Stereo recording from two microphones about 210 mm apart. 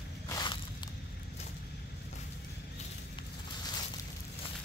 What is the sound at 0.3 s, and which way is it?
Walk, 20° left (ahead or behind).